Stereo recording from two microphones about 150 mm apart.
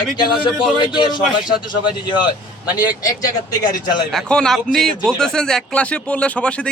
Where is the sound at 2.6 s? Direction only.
25° left (ahead or behind).